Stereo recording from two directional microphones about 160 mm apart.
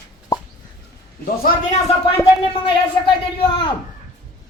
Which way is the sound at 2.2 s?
30° left (ahead or behind).